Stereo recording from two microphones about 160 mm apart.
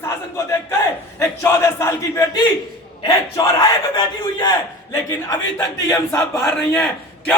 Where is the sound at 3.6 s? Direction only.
25° left (ahead or behind).